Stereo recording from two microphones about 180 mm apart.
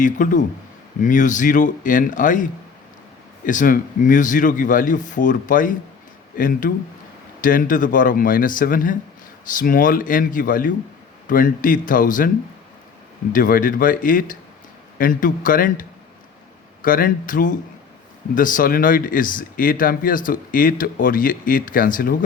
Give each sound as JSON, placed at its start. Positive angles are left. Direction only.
{"t": 0.0, "sound": "speech", "side_deg": 45}
{"t": 13.3, "sound": "speech", "side_deg": 50}